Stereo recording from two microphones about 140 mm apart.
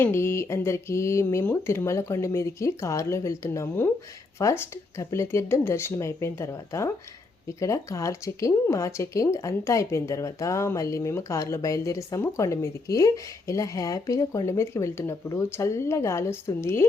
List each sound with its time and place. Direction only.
0.0 s speech: 15° left (ahead or behind)